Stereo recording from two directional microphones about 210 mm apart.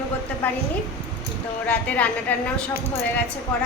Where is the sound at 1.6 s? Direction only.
5° left (ahead or behind).